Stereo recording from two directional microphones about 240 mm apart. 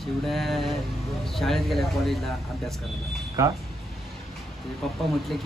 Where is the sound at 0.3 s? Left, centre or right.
Centre.